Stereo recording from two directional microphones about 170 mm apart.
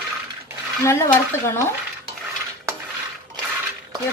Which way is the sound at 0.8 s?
15° left (ahead or behind).